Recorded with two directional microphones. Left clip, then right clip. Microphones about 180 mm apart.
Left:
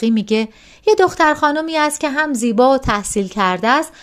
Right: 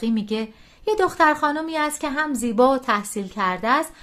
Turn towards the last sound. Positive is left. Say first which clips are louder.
# left 5 dB
turn(degrees=40)  # may be behind; listen again after turning